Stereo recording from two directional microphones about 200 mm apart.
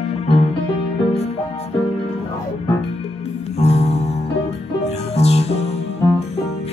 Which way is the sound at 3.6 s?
30° left (ahead or behind).